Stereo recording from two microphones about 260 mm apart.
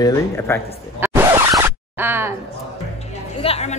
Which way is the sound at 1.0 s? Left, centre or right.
Centre.